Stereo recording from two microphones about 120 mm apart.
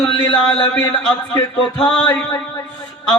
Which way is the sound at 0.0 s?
40° left (ahead or behind).